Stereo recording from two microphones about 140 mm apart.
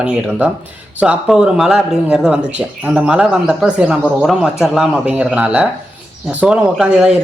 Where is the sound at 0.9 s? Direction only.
5° right (ahead or behind).